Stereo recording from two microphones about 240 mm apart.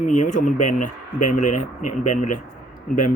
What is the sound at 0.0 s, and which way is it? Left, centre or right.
Speech, left.